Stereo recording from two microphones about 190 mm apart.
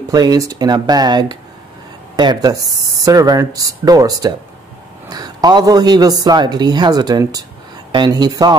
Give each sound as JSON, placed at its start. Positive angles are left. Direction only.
{"t": 0.1, "sound": "speech", "side_deg": -20}